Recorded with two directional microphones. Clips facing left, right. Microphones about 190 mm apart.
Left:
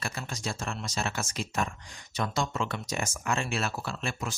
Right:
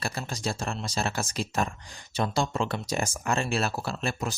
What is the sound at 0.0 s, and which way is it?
Speech, 35° right (ahead or behind).